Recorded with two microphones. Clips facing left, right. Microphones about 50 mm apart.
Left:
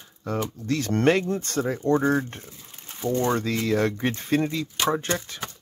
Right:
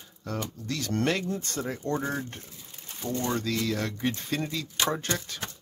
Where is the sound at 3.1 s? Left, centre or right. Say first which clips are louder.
Left 4 dB; left.